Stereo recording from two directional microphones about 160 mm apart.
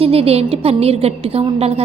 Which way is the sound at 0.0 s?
35° right (ahead or behind).